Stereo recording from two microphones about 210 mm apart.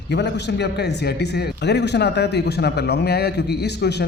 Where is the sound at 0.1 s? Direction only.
55° left (ahead or behind).